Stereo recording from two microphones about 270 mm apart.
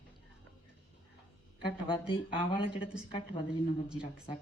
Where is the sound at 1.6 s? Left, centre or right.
Centre.